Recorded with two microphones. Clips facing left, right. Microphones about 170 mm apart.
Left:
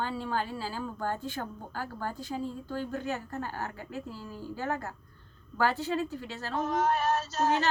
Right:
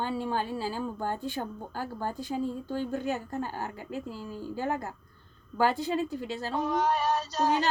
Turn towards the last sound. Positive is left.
turn(degrees=5)  # may be behind; listen again after turning